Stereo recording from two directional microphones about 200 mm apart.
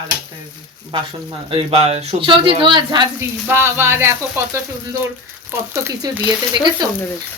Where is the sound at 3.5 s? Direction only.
10° right (ahead or behind).